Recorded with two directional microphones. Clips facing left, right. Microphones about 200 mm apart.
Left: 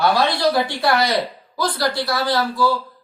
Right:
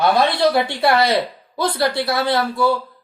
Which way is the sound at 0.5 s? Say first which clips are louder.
Right 2 dB; 25° right (ahead or behind).